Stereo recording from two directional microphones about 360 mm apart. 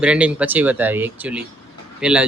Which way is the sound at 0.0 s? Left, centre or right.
Centre.